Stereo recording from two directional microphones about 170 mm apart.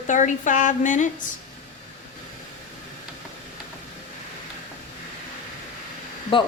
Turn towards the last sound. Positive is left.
turn(degrees=30)  # may be behind; listen again after turning